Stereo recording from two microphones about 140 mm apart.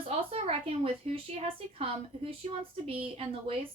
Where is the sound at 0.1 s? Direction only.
45° right (ahead or behind).